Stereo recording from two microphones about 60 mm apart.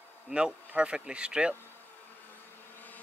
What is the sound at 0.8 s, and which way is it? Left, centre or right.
Speech, centre.